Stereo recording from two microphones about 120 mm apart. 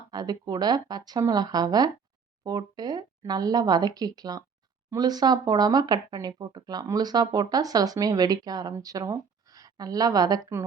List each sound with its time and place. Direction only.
0.1 s speech: 35° right (ahead or behind)